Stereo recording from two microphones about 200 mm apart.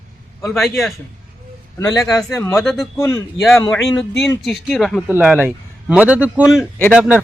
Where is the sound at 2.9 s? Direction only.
15° left (ahead or behind).